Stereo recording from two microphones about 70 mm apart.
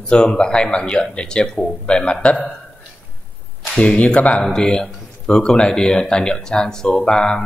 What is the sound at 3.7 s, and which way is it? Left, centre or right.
Speech, centre.